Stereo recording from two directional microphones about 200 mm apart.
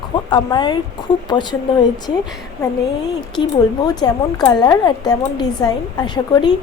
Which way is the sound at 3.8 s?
20° left (ahead or behind).